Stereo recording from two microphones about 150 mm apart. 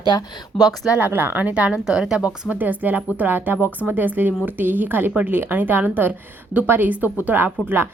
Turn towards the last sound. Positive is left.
turn(degrees=-15)  # may be behind; listen again after turning